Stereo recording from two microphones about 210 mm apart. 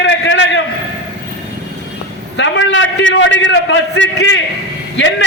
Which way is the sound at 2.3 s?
60° left (ahead or behind).